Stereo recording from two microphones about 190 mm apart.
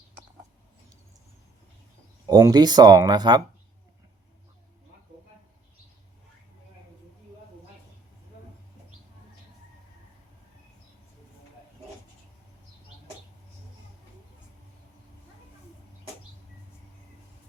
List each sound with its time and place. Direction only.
2.2 s speech: 20° right (ahead or behind)